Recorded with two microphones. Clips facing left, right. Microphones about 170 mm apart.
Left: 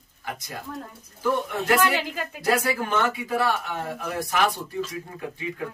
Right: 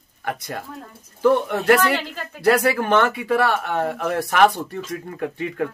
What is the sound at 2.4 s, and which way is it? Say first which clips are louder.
Speech: right 6 dB; 65° right (ahead or behind).